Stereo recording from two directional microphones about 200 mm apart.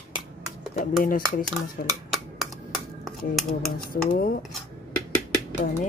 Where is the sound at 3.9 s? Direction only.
45° left (ahead or behind).